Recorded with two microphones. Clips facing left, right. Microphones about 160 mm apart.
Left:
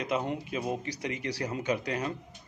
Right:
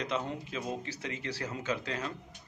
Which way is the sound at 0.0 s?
10° left (ahead or behind).